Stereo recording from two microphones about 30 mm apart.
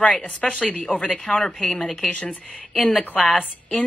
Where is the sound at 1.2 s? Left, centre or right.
Centre.